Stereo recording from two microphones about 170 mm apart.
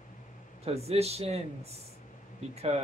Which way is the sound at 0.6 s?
35° right (ahead or behind).